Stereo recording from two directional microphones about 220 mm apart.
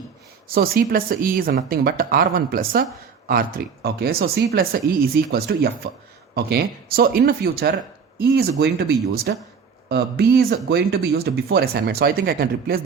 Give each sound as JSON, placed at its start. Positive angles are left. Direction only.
{"t": 0.4, "sound": "speech", "side_deg": -40}